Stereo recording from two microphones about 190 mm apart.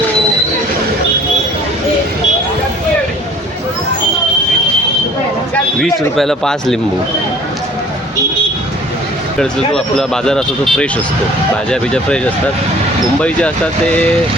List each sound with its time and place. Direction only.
5.8 s speech: centre (ahead or behind)
9.4 s speech: 5° left (ahead or behind)